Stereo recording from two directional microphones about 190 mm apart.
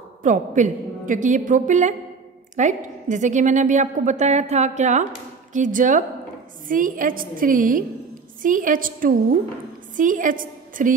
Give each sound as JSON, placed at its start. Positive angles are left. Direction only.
{"t": 0.2, "sound": "a woman's voice", "side_deg": -40}